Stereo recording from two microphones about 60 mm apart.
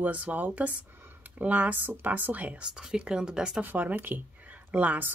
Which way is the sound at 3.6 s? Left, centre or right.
Right.